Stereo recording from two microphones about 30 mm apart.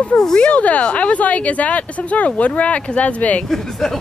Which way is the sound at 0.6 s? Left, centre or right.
Left.